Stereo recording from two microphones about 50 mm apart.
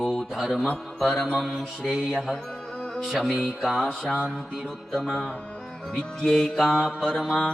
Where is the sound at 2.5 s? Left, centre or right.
Centre.